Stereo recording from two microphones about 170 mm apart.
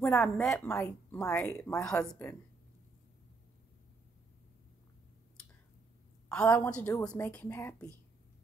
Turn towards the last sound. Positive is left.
turn(degrees=15)  # may be behind; listen again after turning